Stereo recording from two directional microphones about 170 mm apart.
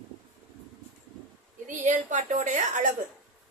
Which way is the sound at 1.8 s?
45° right (ahead or behind).